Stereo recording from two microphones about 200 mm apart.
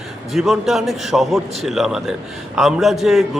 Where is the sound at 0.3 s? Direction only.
Centre (ahead or behind).